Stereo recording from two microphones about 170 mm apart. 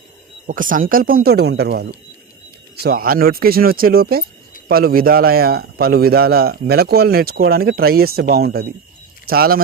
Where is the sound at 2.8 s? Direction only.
60° right (ahead or behind).